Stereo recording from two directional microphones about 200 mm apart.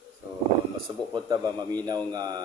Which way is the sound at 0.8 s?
20° right (ahead or behind).